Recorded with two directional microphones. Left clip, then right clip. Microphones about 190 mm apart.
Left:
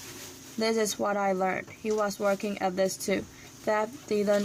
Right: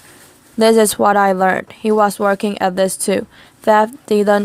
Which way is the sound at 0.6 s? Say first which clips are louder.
Right 16 dB; 50° right (ahead or behind).